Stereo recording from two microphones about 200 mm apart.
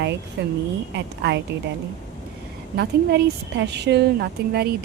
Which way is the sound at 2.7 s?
55° right (ahead or behind).